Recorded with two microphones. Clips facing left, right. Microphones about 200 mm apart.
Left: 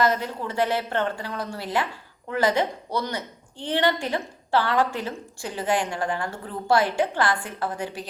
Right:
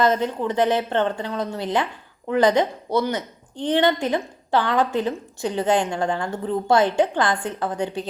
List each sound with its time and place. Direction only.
0.0 s a woman's voice: 20° right (ahead or behind)